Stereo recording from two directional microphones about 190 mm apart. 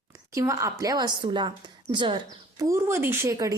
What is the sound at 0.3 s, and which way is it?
A woman's voice, 15° right (ahead or behind).